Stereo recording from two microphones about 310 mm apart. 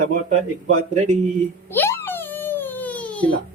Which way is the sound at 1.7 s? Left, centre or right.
Centre.